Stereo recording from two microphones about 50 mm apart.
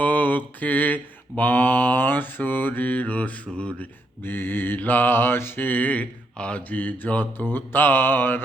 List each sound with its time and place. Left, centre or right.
0.0 s mantra: left
4.2 s mantra: left
6.3 s mantra: left
6.6 s mantra: left